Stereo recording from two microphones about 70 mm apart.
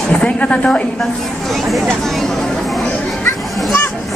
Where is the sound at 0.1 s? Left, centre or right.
Centre.